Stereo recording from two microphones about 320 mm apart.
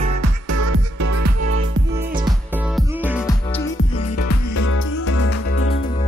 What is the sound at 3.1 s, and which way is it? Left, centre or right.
Music, centre.